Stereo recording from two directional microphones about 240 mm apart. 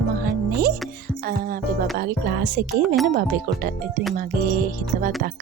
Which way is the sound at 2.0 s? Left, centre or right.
Right.